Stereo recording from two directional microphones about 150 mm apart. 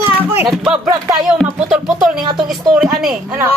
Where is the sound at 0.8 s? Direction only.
30° right (ahead or behind).